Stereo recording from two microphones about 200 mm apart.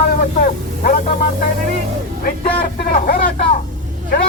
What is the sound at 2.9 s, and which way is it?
Speech, 45° left (ahead or behind).